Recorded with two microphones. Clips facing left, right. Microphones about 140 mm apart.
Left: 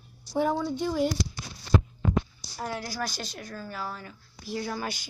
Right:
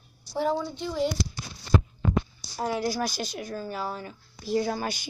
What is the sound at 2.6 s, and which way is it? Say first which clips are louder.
A woman's voice: right 6 dB; 20° right (ahead or behind).